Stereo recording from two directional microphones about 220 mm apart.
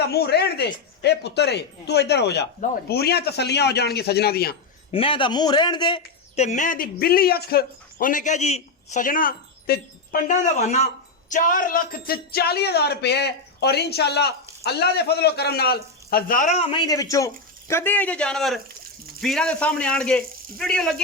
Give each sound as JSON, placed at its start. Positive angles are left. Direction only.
{"t": 0.1, "sound": "speech", "side_deg": 45}
{"t": 4.9, "sound": "a man's voice", "side_deg": 25}